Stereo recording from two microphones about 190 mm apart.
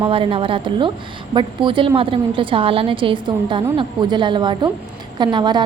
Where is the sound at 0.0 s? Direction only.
30° right (ahead or behind).